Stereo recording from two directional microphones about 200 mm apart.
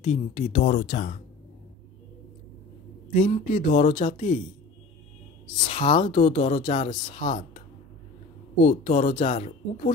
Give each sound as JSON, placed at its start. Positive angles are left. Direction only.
{"t": 0.1, "sound": "speech", "side_deg": 30}
{"t": 3.1, "sound": "speech", "side_deg": 35}
{"t": 5.7, "sound": "speech", "side_deg": 25}
{"t": 8.6, "sound": "speech", "side_deg": 30}